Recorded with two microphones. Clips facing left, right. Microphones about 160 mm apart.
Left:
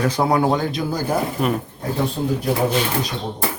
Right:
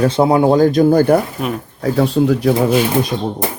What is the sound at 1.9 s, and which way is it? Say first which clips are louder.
Speech: right 8 dB; 85° right.